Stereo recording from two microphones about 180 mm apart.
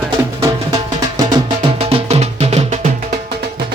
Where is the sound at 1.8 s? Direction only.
35° right (ahead or behind).